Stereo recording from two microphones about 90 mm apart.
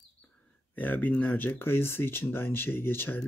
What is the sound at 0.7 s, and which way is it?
Speech, 20° left (ahead or behind).